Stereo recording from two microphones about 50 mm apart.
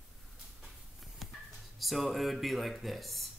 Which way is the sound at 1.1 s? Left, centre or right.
Centre.